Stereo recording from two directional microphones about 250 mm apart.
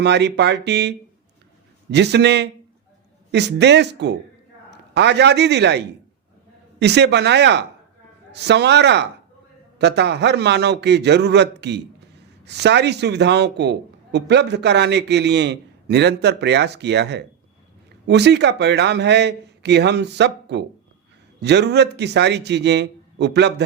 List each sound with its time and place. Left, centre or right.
0.0 s a man's voice: right